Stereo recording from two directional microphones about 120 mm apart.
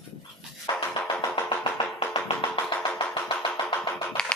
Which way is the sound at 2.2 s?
45° left (ahead or behind).